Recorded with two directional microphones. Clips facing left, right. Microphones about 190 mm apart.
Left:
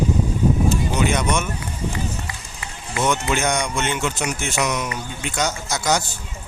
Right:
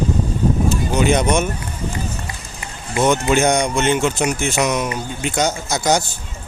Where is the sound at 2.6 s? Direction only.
25° right (ahead or behind).